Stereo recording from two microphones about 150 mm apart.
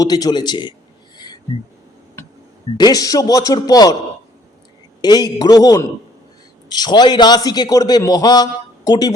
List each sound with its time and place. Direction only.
0.0 s a man's voice: 25° left (ahead or behind)
2.7 s a man's voice: 25° left (ahead or behind)
5.0 s a man's voice: 25° left (ahead or behind)